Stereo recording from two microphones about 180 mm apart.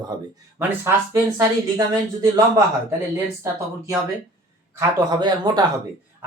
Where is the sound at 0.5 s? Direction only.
10° right (ahead or behind).